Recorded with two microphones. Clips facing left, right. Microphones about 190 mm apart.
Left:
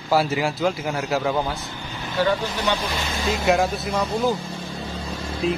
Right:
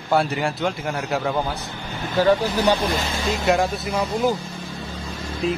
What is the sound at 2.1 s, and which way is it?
Speech, 35° right (ahead or behind).